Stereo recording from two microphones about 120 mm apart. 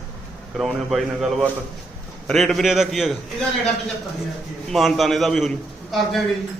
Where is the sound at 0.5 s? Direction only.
Centre (ahead or behind).